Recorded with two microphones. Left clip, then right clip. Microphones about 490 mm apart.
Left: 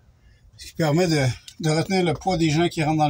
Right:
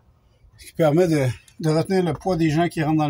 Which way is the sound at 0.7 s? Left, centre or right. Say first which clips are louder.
Right 3 dB; right.